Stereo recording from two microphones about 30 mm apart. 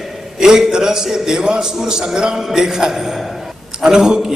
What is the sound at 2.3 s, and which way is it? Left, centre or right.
A man's voice, centre.